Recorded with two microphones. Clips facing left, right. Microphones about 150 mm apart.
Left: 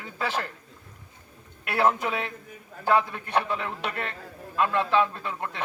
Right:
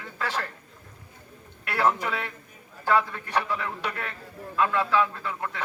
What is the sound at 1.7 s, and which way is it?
A man's voice, 15° left (ahead or behind).